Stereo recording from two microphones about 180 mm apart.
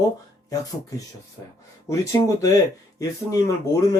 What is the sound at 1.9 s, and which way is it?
Speech, 20° left (ahead or behind).